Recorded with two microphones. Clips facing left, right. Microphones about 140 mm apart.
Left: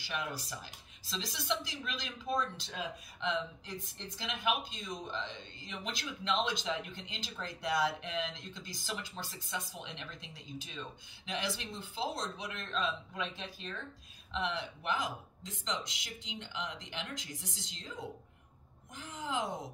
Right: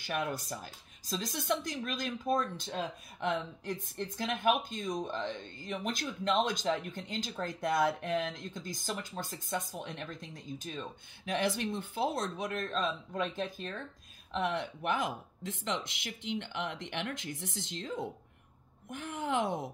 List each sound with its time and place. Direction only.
0.0 s speech: 50° right (ahead or behind)